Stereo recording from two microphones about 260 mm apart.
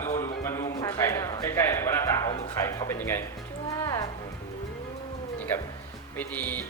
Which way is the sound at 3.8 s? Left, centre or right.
Centre.